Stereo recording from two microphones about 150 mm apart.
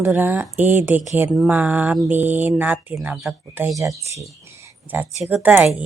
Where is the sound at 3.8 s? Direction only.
20° right (ahead or behind).